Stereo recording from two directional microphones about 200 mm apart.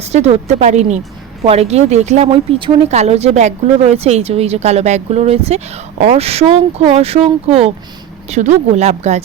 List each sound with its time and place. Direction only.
0.1 s a woman's voice: 35° right (ahead or behind)